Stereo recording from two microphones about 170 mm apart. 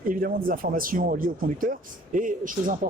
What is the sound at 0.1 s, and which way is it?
Speech, 60° right (ahead or behind).